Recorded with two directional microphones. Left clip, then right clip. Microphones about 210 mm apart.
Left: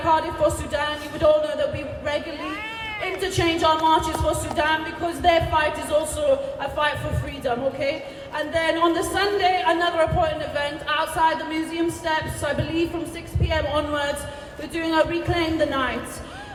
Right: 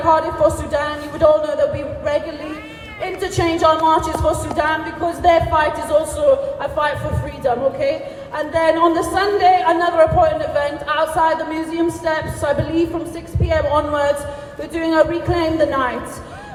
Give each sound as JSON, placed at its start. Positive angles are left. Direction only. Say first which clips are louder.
{"t": 0.0, "sound": "a woman's voice", "louder": "right 6 dB", "side_deg": -15}